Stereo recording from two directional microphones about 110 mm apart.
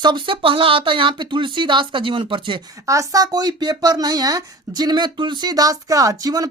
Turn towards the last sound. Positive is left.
turn(degrees=-35)  # may be behind; listen again after turning